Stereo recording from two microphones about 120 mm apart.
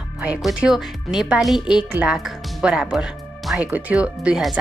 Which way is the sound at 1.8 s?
15° right (ahead or behind).